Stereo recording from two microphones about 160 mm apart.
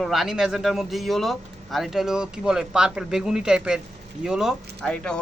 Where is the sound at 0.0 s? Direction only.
Centre (ahead or behind).